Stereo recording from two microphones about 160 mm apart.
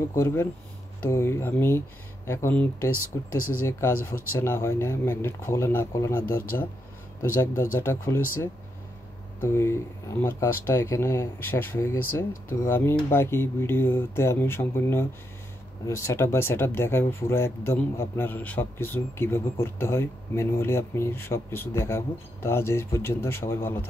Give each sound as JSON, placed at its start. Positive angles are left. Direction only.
{"t": 0.1, "sound": "speech", "side_deg": 15}